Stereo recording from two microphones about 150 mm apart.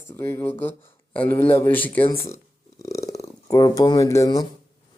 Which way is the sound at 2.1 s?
20° left (ahead or behind).